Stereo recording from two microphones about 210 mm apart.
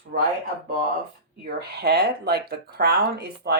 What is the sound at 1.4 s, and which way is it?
Speech, 45° right (ahead or behind).